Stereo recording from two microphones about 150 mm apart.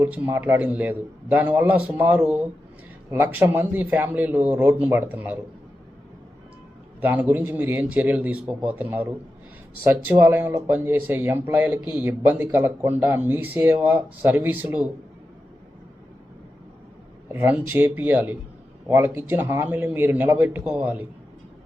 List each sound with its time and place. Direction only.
0.0 s speech: 10° right (ahead or behind)
7.0 s speech: 10° right (ahead or behind)
10.1 s speech: 15° right (ahead or behind)
17.2 s speech: 10° right (ahead or behind)